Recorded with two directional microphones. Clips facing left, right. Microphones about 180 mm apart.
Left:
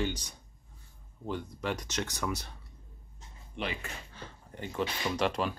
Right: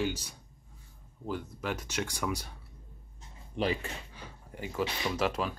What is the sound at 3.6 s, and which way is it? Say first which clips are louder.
Speech: right 6 dB; 35° right (ahead or behind).